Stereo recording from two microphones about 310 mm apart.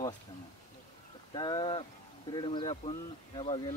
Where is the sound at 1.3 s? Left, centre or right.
Centre.